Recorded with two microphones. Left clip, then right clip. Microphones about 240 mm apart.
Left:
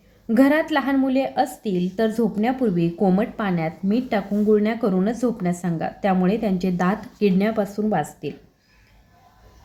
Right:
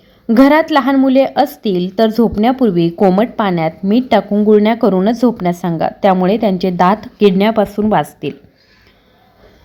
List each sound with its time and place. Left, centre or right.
0.3 s a woman's voice: right